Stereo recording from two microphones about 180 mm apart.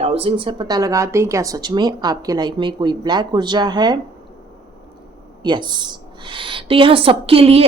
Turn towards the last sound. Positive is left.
turn(degrees=-35)  # may be behind; listen again after turning